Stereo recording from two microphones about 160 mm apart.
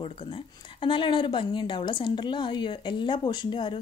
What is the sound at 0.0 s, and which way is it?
A woman's voice, 35° left (ahead or behind).